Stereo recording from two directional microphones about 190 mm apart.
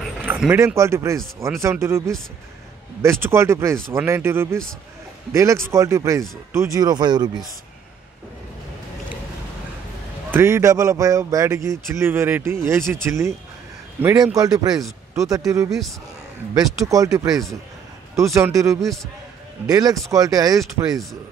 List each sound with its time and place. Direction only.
0.2 s speech: 10° right (ahead or behind)
10.3 s speech: 15° right (ahead or behind)